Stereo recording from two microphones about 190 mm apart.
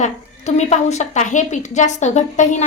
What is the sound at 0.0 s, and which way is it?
A woman's voice, 35° left (ahead or behind).